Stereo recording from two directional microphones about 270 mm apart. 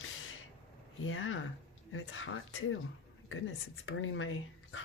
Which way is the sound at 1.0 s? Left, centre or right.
Left.